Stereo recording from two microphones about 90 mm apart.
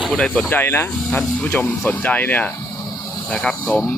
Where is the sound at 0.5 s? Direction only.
25° left (ahead or behind).